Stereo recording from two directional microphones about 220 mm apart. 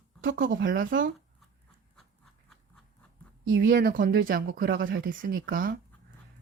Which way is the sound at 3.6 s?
40° right (ahead or behind).